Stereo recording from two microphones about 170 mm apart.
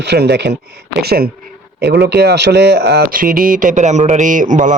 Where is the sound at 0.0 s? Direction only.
75° right (ahead or behind).